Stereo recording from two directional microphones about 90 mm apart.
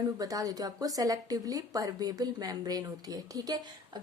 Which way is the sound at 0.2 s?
40° right (ahead or behind).